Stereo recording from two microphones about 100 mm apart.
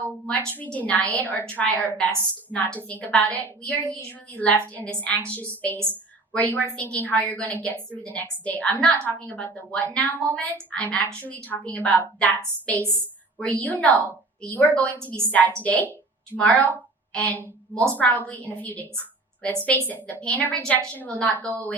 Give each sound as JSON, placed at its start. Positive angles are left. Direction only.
{"t": 0.3, "sound": "a woman's voice", "side_deg": 15}
{"t": 13.4, "sound": "a woman's voice", "side_deg": 15}